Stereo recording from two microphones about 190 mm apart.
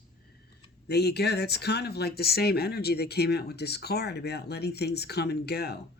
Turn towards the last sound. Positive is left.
turn(degrees=60)  # may be behind; listen again after turning